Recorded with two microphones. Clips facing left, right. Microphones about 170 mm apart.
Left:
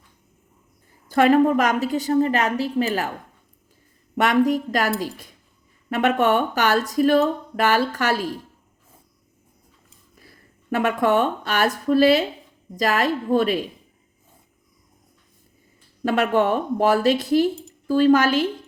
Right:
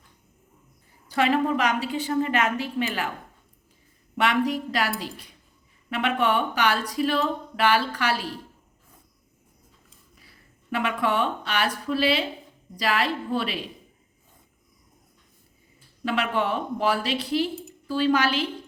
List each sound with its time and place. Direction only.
1.0 s a woman's voice: 50° left (ahead or behind)
4.2 s speech: 45° left (ahead or behind)
10.2 s a woman's voice: 45° left (ahead or behind)
16.0 s speech: 45° left (ahead or behind)